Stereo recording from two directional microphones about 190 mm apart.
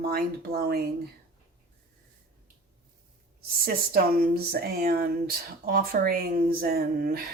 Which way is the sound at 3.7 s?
55° right (ahead or behind).